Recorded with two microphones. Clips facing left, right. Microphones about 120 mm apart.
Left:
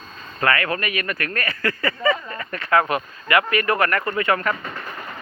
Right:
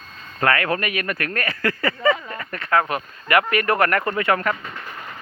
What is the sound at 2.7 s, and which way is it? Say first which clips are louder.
Speech: left 1 dB; 15° left (ahead or behind).